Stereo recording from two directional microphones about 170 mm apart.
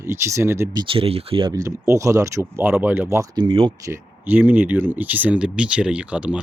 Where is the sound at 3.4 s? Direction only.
30° right (ahead or behind).